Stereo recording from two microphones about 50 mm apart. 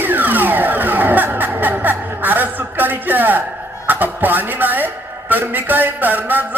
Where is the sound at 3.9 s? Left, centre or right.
Right.